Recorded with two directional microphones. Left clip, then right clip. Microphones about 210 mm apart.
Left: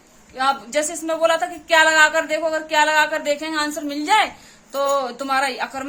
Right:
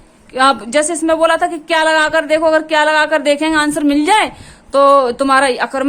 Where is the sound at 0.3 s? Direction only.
45° right (ahead or behind).